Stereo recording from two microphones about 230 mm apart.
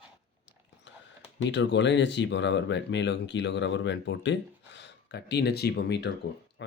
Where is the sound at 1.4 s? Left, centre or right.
Left.